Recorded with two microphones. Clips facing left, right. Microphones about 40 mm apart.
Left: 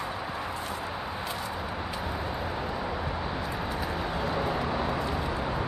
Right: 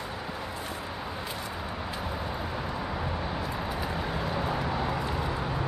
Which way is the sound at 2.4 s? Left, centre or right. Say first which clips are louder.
Left 1 dB; centre.